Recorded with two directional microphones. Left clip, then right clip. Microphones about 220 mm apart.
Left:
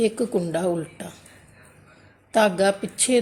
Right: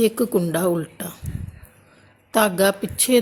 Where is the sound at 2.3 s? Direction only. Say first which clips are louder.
Right 1 dB; 20° right (ahead or behind).